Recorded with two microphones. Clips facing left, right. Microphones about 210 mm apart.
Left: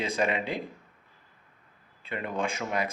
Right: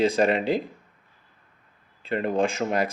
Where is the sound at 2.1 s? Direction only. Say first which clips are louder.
Right 8 dB; 35° right (ahead or behind).